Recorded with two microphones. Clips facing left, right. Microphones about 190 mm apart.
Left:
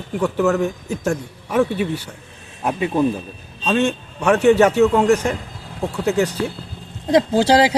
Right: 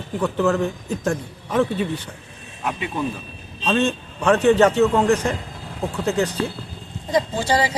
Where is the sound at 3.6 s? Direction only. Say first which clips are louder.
Left 2 dB; 10° left (ahead or behind).